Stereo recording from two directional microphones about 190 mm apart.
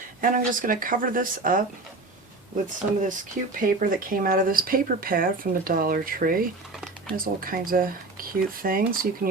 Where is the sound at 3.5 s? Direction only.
45° right (ahead or behind).